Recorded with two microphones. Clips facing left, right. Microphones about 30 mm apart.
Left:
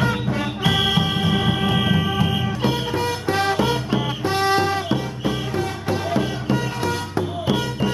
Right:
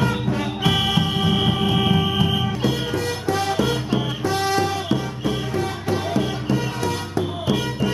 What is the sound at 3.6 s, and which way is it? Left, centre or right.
Music, centre.